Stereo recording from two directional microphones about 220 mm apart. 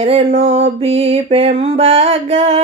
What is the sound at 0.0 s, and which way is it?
Mantra, 30° right (ahead or behind).